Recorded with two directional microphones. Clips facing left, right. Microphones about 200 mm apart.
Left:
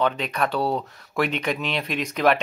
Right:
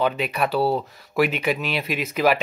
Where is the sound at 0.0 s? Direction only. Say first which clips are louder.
Right 1 dB; 10° right (ahead or behind).